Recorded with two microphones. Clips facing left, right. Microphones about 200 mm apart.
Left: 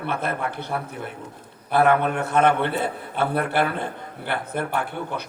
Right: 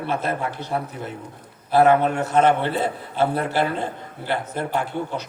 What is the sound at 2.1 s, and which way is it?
A man's voice, 60° left (ahead or behind).